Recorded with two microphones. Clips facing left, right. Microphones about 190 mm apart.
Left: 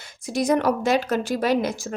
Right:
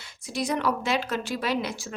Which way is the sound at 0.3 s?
45° left (ahead or behind).